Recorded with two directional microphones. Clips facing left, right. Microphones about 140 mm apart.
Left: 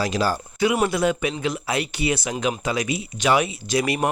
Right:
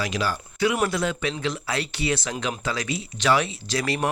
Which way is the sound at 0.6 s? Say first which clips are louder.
Left 3 dB; 20° left (ahead or behind).